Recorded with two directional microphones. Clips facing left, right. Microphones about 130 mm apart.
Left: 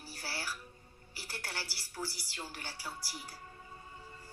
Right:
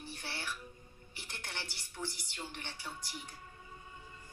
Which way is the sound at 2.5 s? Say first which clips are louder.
Even; 35° left (ahead or behind).